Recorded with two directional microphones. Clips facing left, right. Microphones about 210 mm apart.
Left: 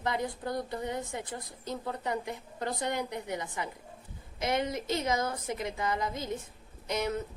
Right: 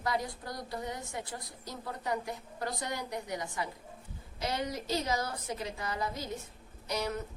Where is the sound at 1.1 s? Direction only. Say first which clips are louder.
Left 2 dB; 20° left (ahead or behind).